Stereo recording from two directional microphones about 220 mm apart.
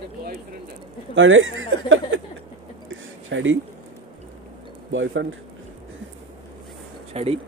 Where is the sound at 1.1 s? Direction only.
65° right (ahead or behind).